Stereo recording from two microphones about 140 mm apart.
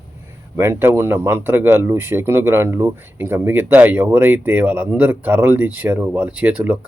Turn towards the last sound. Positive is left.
turn(degrees=-10)  # may be behind; listen again after turning